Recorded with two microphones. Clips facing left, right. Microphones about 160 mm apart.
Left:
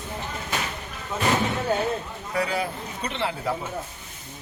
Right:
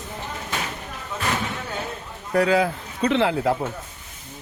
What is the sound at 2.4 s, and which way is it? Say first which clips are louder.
Speech: right 7 dB; 90° right.